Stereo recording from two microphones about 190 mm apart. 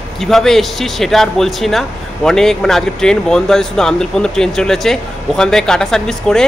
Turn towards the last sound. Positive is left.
turn(degrees=5)  # may be behind; listen again after turning